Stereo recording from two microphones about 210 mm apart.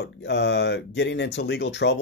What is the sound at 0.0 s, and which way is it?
Speech, 55° left (ahead or behind).